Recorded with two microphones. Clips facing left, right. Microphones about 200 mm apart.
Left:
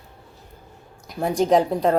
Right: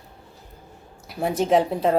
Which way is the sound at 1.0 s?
5° right (ahead or behind).